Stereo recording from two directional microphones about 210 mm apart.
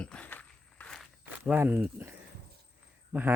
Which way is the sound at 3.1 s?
5° right (ahead or behind).